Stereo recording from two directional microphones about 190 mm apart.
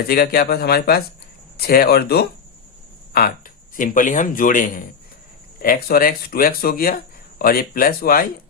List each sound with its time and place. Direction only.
0.1 s speech: 55° left (ahead or behind)